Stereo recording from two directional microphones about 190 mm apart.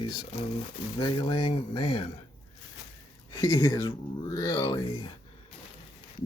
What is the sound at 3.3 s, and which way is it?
Speech, 25° left (ahead or behind).